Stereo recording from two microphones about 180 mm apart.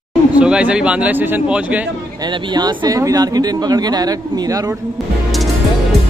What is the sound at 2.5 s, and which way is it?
Speech, 25° right (ahead or behind).